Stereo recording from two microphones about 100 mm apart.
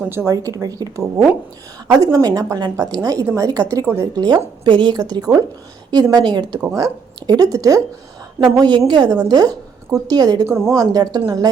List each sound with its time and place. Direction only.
0.1 s a woman's voice: 30° right (ahead or behind)
4.1 s a woman's voice: 45° right (ahead or behind)
8.4 s a woman's voice: 50° right (ahead or behind)